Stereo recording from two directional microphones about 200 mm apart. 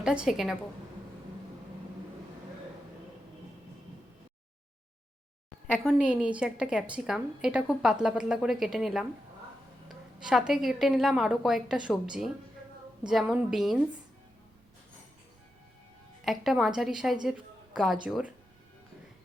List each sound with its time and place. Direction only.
0.0 s a woman's voice: 5° right (ahead or behind)
5.7 s a woman's voice: centre (ahead or behind)
10.2 s a woman's voice: 5° right (ahead or behind)
16.2 s a woman's voice: centre (ahead or behind)
17.2 s a sound: centre (ahead or behind)
18.0 s speech: 5° right (ahead or behind)